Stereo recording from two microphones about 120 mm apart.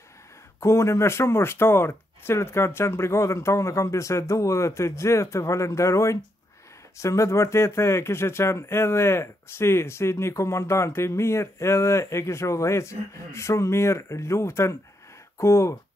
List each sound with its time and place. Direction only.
0.6 s speech: 25° left (ahead or behind)